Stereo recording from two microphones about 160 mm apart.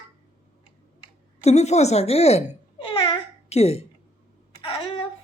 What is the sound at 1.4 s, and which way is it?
Babbling, 45° left (ahead or behind).